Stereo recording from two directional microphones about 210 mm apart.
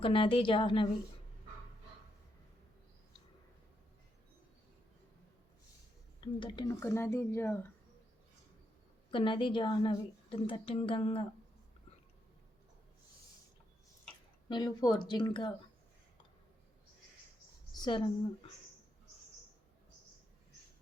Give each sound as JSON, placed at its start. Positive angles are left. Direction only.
{"t": 0.0, "sound": "a woman's voice", "side_deg": 25}
{"t": 6.1, "sound": "speech", "side_deg": 25}
{"t": 6.7, "sound": "speech", "side_deg": 10}
{"t": 9.0, "sound": "a woman's voice", "side_deg": 25}
{"t": 14.5, "sound": "a woman's voice", "side_deg": 20}
{"t": 17.7, "sound": "a woman's voice", "side_deg": 25}